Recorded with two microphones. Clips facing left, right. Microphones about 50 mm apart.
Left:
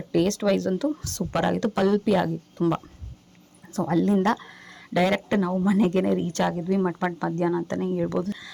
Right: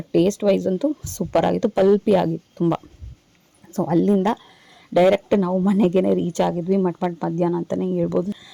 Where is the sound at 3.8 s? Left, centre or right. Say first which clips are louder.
Right 4 dB; right.